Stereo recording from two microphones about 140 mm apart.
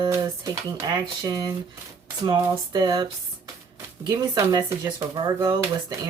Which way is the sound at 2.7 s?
30° right (ahead or behind).